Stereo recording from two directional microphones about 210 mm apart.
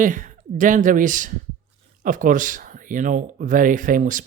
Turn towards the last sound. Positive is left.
turn(degrees=-40)  # may be behind; listen again after turning